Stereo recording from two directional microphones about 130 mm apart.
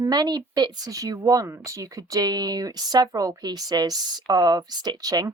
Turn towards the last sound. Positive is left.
turn(degrees=-30)  # may be behind; listen again after turning